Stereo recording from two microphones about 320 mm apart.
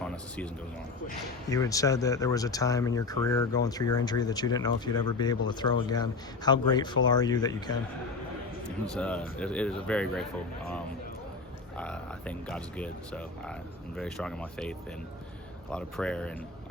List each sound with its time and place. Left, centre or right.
1.5 s speech: centre
9.0 s speech: centre
11.8 s speech: centre